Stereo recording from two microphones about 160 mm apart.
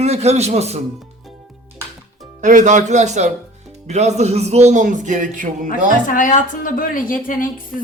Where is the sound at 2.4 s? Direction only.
50° right (ahead or behind).